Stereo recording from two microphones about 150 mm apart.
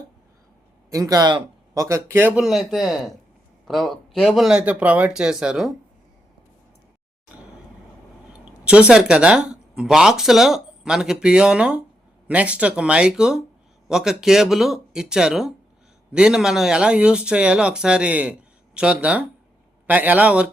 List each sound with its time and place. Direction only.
0.9 s speech: 25° right (ahead or behind)
2.4 s speech: centre (ahead or behind)
8.3 s speech: 10° right (ahead or behind)